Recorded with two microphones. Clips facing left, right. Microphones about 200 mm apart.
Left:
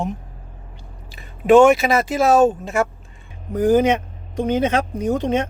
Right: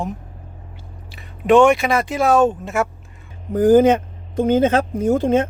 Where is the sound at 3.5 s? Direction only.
30° right (ahead or behind).